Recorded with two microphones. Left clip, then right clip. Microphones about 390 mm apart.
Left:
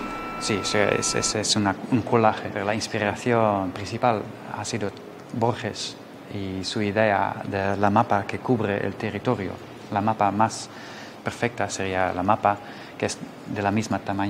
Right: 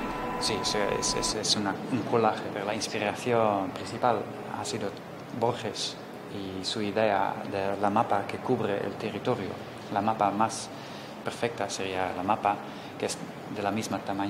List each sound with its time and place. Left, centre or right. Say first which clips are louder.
0.4 s speech: left 6 dB; left